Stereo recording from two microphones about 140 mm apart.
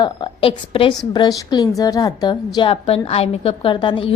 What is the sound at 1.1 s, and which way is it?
A woman's voice, 25° left (ahead or behind).